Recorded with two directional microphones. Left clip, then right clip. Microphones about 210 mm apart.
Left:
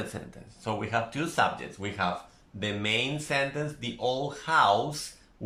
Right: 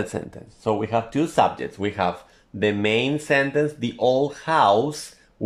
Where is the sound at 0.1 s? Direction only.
35° right (ahead or behind).